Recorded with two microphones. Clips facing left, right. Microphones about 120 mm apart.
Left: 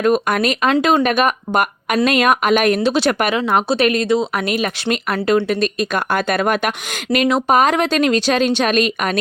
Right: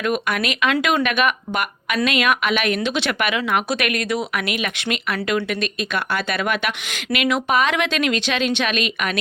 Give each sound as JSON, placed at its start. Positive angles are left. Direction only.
{"t": 0.0, "sound": "speech", "side_deg": 40}